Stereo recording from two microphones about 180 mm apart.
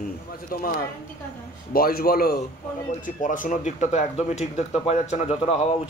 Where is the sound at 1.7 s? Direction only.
55° left (ahead or behind).